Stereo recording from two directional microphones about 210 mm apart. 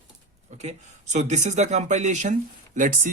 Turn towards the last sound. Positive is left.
turn(degrees=-40)  # may be behind; listen again after turning